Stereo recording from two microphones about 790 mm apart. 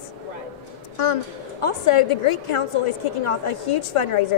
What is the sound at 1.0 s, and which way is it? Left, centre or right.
A woman's voice, left.